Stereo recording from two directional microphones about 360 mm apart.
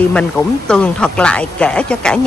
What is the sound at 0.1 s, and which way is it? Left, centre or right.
A woman's voice, centre.